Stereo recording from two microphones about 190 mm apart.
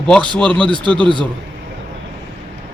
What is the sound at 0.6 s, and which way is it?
Speech, 25° right (ahead or behind).